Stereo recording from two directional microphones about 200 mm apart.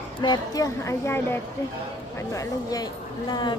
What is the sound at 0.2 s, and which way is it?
A woman's voice, 20° left (ahead or behind).